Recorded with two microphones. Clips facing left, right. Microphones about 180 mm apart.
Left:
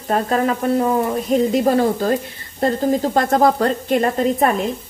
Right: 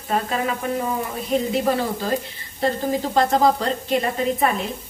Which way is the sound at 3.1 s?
50° left (ahead or behind).